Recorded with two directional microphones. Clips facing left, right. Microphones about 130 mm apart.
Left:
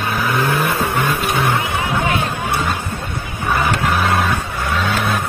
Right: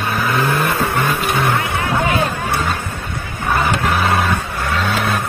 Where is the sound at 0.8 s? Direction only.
10° left (ahead or behind).